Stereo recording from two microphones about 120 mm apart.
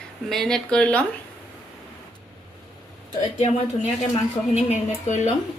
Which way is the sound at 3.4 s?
70° left (ahead or behind).